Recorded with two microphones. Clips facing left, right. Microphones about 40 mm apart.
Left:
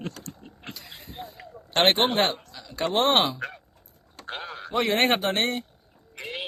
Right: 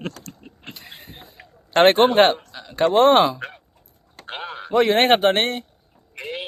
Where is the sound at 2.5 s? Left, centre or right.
Right.